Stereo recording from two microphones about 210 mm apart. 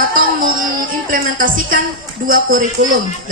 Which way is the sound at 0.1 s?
40° right (ahead or behind).